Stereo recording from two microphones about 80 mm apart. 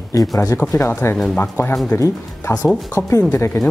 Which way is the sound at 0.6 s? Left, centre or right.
Left.